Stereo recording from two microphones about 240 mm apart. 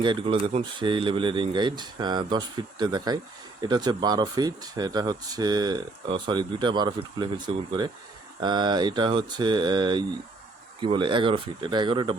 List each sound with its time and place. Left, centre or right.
0.0 s speech: right